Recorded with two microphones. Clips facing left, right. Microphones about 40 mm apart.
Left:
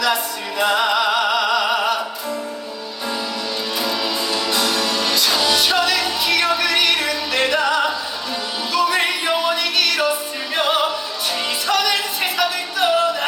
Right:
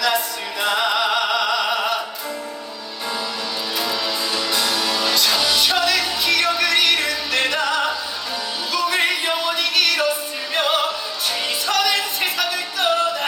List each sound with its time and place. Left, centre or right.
0.6 s music: centre
3.8 s music: centre